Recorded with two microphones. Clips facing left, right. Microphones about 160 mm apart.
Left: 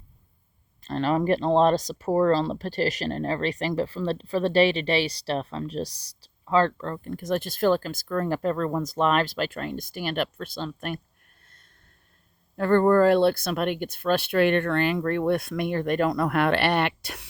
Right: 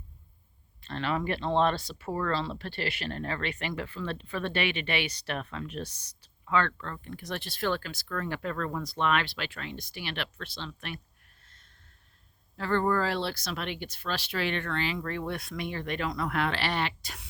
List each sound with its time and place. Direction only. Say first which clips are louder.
0.9 s speech: left 8 dB; 40° left (ahead or behind)
7.1 s speech: left 12 dB; 45° left (ahead or behind)
12.5 s speech: left 9 dB; 55° left (ahead or behind)